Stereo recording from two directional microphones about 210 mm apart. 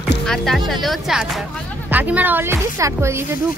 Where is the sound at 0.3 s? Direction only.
Centre (ahead or behind).